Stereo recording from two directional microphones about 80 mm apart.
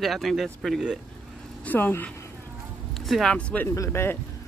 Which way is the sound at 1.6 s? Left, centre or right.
Left.